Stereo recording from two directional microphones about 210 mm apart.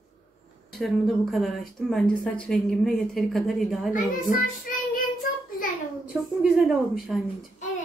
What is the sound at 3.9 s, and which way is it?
A child's voice, 40° left (ahead or behind).